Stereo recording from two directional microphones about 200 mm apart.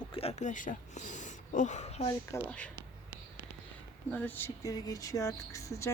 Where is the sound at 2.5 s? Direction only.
5° left (ahead or behind).